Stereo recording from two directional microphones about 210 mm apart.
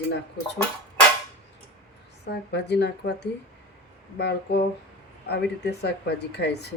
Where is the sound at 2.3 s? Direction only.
55° left (ahead or behind).